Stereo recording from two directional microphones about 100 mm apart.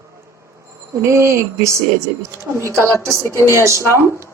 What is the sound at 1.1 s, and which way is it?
A woman's voice, 30° right (ahead or behind).